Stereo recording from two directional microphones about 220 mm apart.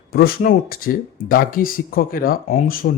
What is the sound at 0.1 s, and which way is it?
A man's voice, 45° left (ahead or behind).